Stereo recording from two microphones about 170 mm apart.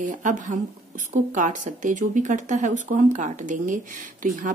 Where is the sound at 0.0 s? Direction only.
50° right (ahead or behind).